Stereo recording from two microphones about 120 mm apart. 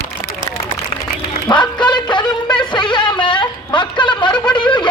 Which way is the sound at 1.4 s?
40° left (ahead or behind).